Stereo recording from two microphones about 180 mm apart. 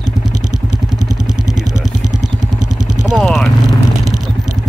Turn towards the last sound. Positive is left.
turn(degrees=0)  # may be behind; listen again after turning